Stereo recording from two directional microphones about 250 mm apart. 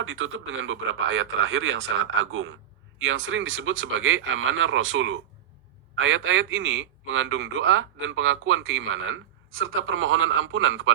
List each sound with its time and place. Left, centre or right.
0.0 s speech: right